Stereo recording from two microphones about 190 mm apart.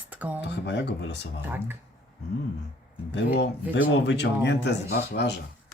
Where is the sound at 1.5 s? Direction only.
10° right (ahead or behind).